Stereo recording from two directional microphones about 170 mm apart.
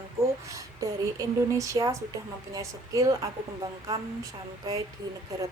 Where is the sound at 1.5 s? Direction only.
20° right (ahead or behind).